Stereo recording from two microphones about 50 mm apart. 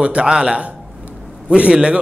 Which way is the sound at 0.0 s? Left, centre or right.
Right.